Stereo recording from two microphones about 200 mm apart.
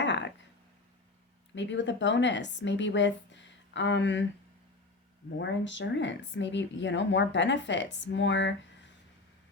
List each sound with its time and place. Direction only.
0.0 s a sound: 60° left (ahead or behind)
1.5 s speech: 65° left (ahead or behind)
5.4 s speech: 65° left (ahead or behind)